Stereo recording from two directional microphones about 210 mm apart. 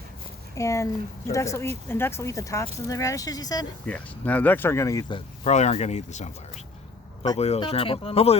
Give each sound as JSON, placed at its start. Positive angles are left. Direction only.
{"t": 0.5, "sound": "speech", "side_deg": 15}
{"t": 3.8, "sound": "speech", "side_deg": 5}